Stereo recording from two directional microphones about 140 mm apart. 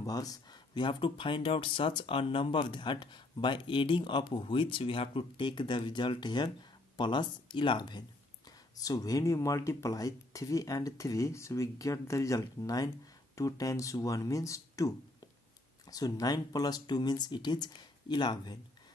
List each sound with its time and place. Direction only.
0.0 s speech: 25° left (ahead or behind)